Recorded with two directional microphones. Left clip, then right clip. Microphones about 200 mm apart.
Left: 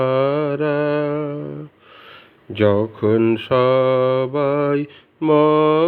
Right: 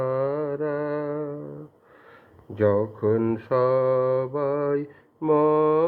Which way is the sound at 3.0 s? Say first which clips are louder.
Left 7 dB; 30° left (ahead or behind).